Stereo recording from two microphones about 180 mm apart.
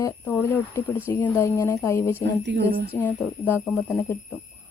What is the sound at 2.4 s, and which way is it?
Speech, 75° right (ahead or behind).